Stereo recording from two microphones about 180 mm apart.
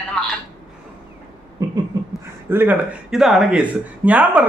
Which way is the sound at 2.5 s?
10° right (ahead or behind).